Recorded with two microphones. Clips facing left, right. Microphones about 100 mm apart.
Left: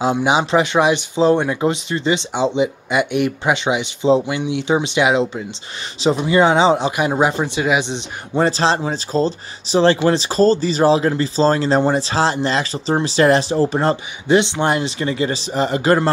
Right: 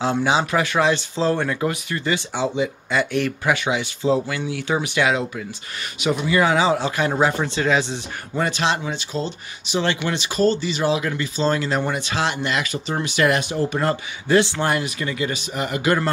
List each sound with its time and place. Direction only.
0.0 s speech: 15° left (ahead or behind)
8.4 s speech: 35° left (ahead or behind)